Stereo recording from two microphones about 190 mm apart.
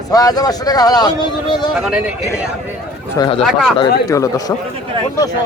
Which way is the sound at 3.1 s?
25° left (ahead or behind).